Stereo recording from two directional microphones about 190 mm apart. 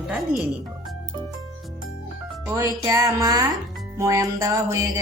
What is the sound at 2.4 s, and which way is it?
Speech, 15° right (ahead or behind).